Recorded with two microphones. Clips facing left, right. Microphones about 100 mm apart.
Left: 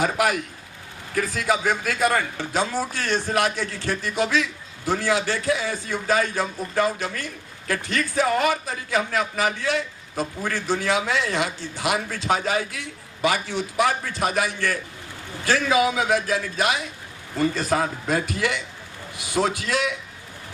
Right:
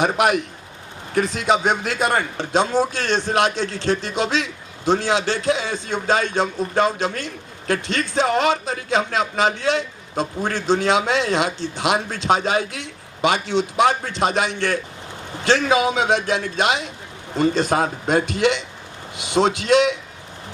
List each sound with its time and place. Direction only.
0.0 s a man's voice: 20° right (ahead or behind)